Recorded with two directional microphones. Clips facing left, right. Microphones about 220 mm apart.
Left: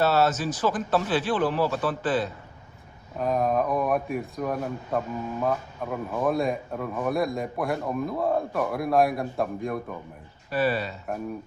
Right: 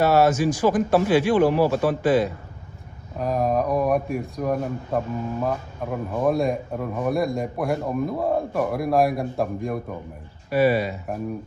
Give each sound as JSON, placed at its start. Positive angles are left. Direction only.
{"t": 0.0, "sound": "speech", "side_deg": -15}
{"t": 1.6, "sound": "speech", "side_deg": -40}
{"t": 1.9, "sound": "speech", "side_deg": -10}
{"t": 3.2, "sound": "a man's voice", "side_deg": 0}
{"t": 10.5, "sound": "speech", "side_deg": -10}